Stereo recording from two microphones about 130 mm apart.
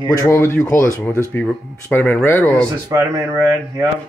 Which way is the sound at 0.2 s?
20° left (ahead or behind).